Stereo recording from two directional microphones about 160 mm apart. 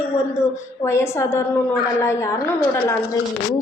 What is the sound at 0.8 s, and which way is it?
A woman's voice, 15° left (ahead or behind).